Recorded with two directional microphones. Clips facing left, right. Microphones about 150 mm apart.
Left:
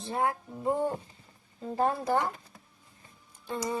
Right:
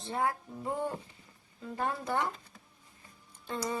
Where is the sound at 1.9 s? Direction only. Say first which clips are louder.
Left 5 dB; 25° left (ahead or behind).